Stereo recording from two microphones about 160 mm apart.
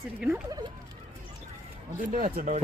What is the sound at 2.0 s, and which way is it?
Speech, 55° right (ahead or behind).